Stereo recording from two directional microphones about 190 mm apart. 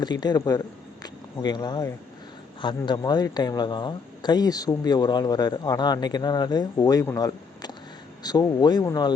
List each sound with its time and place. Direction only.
0.0 s a man's voice: 20° left (ahead or behind)